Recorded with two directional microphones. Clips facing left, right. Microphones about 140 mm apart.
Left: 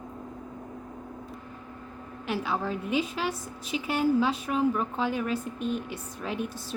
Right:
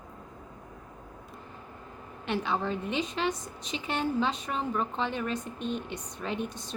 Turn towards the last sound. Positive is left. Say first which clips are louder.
# left 1 dB
turn(degrees=5)  # may be behind; listen again after turning